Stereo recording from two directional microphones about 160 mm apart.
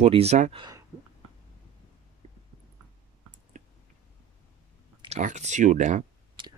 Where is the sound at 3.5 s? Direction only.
50° right (ahead or behind).